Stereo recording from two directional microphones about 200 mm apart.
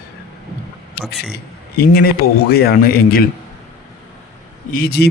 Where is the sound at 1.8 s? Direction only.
50° left (ahead or behind).